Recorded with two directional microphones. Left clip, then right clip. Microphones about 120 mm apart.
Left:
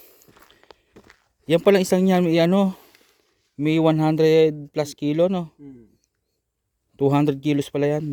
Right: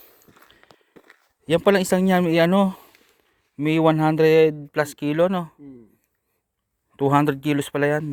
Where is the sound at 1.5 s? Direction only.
50° left (ahead or behind).